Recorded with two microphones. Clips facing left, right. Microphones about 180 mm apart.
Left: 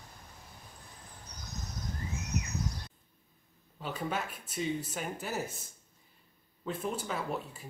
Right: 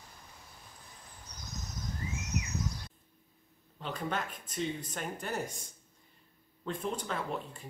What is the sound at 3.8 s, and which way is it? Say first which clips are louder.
Speech: even; 5° left (ahead or behind).